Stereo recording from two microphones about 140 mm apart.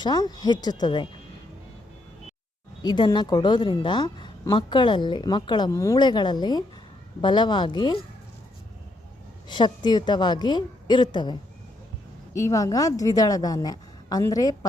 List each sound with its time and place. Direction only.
0.0 s a woman's voice: 30° left (ahead or behind)
2.8 s a woman's voice: 30° left (ahead or behind)
9.5 s a woman's voice: 35° left (ahead or behind)